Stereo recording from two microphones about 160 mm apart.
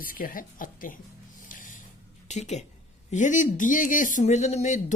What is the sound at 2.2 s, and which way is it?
A woman's voice, 45° left (ahead or behind).